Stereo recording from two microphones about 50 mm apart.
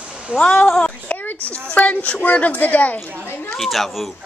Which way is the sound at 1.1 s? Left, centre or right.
Left.